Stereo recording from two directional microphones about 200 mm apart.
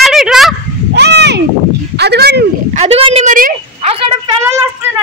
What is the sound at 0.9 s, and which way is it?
Speech, 60° right (ahead or behind).